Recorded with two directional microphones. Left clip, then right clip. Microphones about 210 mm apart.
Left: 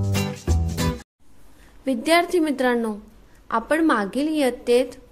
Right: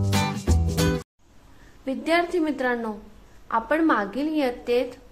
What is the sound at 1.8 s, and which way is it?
A woman's voice, 40° left (ahead or behind).